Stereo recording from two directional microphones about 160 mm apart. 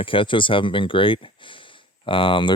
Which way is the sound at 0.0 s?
30° left (ahead or behind).